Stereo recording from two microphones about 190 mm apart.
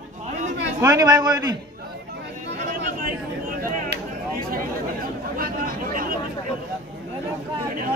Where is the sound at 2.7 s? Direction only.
45° right (ahead or behind).